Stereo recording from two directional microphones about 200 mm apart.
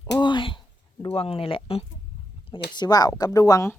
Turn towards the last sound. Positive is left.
turn(degrees=15)  # may be behind; listen again after turning